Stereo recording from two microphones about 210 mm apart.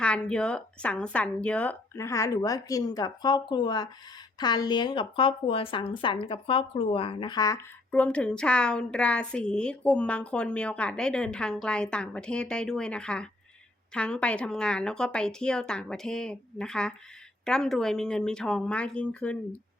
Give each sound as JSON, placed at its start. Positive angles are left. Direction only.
{"t": 0.0, "sound": "a woman's voice", "side_deg": 5}